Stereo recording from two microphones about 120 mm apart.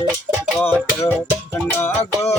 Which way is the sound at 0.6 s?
20° left (ahead or behind).